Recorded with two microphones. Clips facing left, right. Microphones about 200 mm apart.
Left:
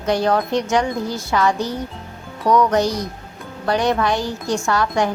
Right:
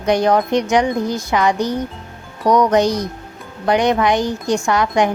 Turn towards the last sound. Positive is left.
turn(degrees=-20)  # may be behind; listen again after turning